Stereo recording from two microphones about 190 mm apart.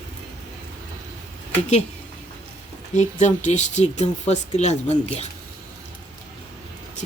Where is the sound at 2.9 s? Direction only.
40° left (ahead or behind).